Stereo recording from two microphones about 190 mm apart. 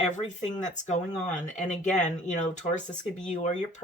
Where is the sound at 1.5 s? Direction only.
40° left (ahead or behind).